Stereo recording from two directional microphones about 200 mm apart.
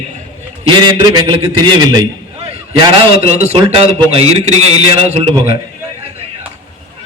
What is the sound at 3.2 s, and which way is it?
A man's voice, 30° right (ahead or behind).